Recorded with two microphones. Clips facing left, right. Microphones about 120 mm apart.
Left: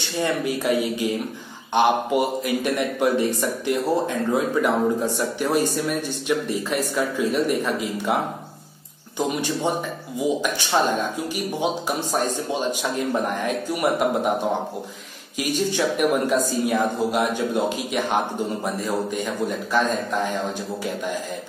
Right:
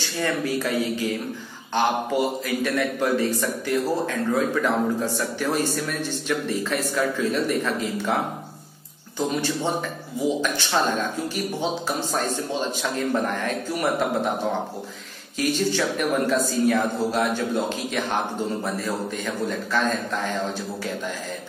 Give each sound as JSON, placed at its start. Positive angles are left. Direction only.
{"t": 0.2, "sound": "a man's voice", "side_deg": 15}
{"t": 9.4, "sound": "a man's voice", "side_deg": 15}